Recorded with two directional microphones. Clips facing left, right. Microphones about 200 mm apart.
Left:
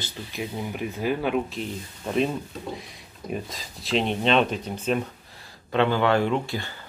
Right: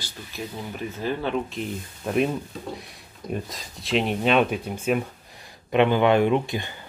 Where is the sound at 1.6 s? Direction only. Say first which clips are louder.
Right 1 dB; 5° right (ahead or behind).